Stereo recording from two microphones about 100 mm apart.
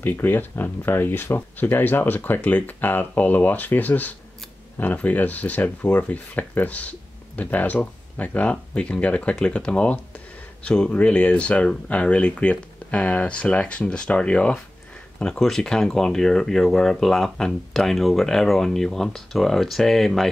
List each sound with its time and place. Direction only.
0.0 s speech: 20° left (ahead or behind); by 20.2 s centre (ahead or behind)